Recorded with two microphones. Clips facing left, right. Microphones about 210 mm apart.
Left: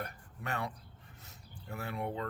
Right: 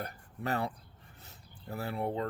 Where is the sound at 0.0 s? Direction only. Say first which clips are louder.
Right 4 dB; 35° right (ahead or behind).